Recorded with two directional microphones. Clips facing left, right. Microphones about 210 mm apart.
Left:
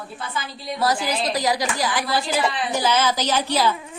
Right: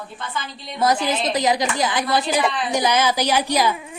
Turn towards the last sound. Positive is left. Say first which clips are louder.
# right 1 dB
turn(degrees=-15)  # may be behind; listen again after turning